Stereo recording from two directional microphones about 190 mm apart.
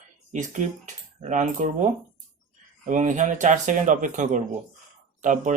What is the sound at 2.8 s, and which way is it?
Speech, 40° right (ahead or behind).